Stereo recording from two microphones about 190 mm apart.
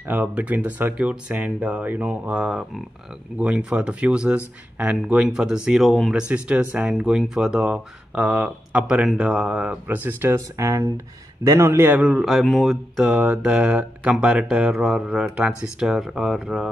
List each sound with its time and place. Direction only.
0.1 s speech: 10° right (ahead or behind)